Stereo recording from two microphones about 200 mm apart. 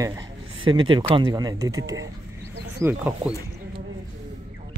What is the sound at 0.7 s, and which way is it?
Speech, 20° right (ahead or behind).